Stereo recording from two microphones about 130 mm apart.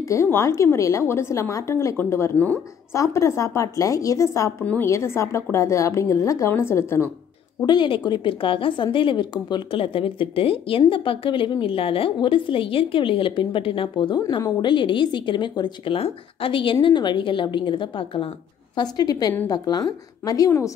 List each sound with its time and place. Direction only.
0.1 s a woman's voice: 20° left (ahead or behind)
7.6 s a woman's voice: 35° left (ahead or behind)